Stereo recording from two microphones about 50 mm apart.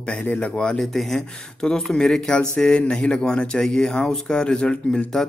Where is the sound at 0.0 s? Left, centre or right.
Left.